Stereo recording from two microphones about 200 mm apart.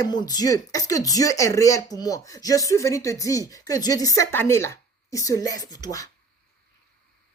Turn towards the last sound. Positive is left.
turn(degrees=15)  # may be behind; listen again after turning